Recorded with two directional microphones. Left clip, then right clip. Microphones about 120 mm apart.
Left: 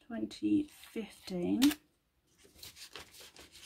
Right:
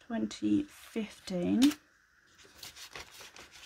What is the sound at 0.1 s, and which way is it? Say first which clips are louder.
Speech: right 1 dB; 45° right (ahead or behind).